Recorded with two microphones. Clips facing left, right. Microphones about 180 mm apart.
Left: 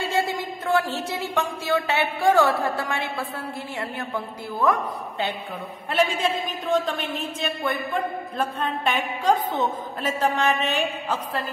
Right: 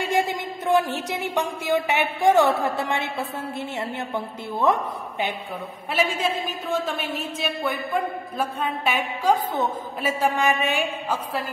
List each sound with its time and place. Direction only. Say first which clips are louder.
0.1 s a man's voice: right 1 dB; 15° right (ahead or behind)
6.7 s a man's voice: left 3 dB; 5° right (ahead or behind)